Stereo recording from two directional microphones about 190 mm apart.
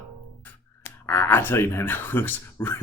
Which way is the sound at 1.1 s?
10° left (ahead or behind).